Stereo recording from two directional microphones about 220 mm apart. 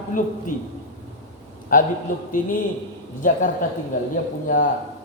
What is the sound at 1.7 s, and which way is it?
Speech, 40° left (ahead or behind).